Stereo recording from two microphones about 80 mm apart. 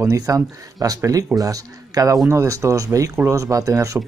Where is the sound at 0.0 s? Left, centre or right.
Right.